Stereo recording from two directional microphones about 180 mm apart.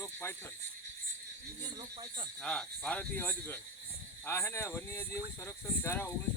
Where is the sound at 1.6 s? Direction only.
25° right (ahead or behind).